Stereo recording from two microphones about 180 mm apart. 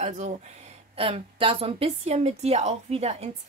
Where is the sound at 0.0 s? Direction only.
40° right (ahead or behind).